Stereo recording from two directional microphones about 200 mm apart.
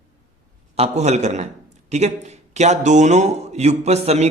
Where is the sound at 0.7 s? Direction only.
30° right (ahead or behind).